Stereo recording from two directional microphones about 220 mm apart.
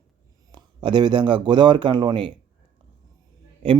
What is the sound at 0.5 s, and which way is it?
Speech, 20° right (ahead or behind).